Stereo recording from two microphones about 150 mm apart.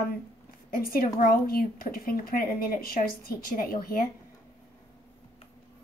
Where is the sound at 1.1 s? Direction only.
75° left (ahead or behind).